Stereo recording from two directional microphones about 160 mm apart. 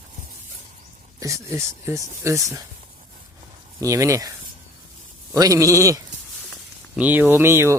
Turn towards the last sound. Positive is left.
turn(degrees=-15)  # may be behind; listen again after turning